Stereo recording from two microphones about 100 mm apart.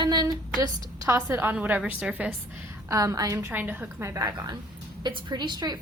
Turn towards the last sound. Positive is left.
turn(degrees=-45)  # may be behind; listen again after turning